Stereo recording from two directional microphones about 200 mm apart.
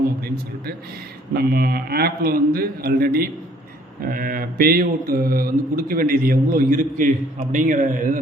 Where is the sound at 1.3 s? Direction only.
50° right (ahead or behind).